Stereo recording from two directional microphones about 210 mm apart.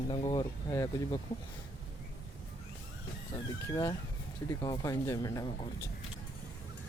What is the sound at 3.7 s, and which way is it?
Speech, 15° left (ahead or behind).